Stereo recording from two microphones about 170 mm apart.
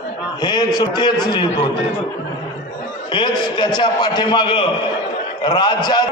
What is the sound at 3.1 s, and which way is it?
A man's voice, 30° left (ahead or behind).